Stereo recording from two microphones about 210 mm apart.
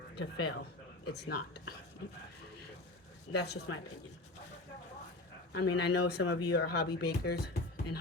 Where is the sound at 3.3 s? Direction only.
55° left (ahead or behind).